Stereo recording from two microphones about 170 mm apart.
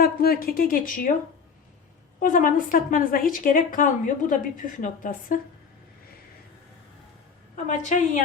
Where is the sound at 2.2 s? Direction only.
50° left (ahead or behind).